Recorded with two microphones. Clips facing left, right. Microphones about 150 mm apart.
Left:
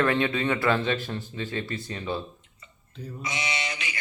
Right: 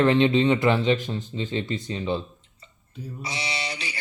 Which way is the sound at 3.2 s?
35° right (ahead or behind).